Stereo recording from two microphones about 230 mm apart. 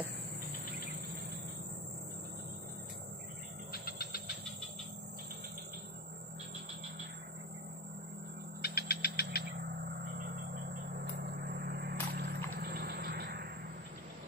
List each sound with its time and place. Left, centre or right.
3.7 s vehicle: left
8.6 s cricket: left
9.5 s a sound: right
12.5 s vehicle: right